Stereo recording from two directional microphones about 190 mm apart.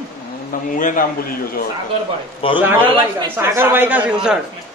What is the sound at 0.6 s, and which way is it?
A man's voice, 45° left (ahead or behind).